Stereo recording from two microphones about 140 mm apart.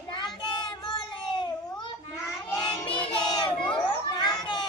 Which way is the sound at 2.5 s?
30° left (ahead or behind).